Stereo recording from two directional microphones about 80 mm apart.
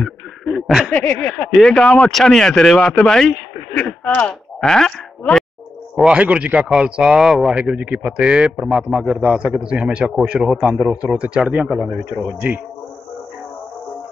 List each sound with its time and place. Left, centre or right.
0.0 s chuckle: centre
0.9 s speech: centre
4.0 s speech: centre
4.3 s speech: centre
6.1 s a man's voice: centre